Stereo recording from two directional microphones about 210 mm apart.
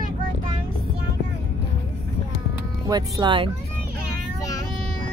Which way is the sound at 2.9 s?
20° right (ahead or behind).